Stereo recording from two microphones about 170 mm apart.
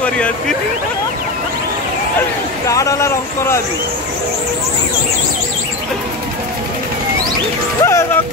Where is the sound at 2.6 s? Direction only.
20° left (ahead or behind).